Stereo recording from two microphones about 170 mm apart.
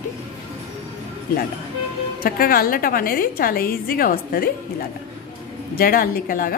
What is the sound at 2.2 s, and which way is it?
A woman's voice, 60° left (ahead or behind).